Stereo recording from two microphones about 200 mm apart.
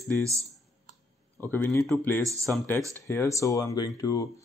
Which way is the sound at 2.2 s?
15° right (ahead or behind).